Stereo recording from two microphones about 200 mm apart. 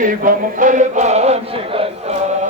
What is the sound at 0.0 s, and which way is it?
Music, 40° right (ahead or behind).